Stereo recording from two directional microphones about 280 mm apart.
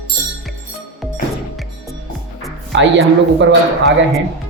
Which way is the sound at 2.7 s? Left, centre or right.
Right.